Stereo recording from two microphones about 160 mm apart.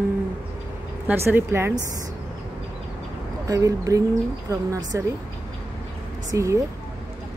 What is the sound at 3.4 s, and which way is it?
Speech, 20° right (ahead or behind).